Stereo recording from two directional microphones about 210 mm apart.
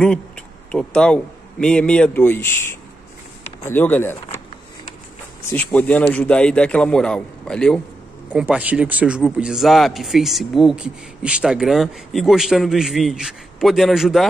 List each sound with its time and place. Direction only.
0.7 s speech: 5° left (ahead or behind)
5.5 s speech: 10° left (ahead or behind)